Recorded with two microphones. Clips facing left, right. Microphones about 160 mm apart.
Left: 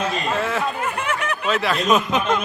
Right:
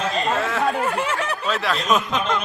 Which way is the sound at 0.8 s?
30° right (ahead or behind).